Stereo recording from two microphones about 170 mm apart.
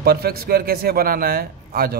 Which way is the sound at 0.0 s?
65° right (ahead or behind).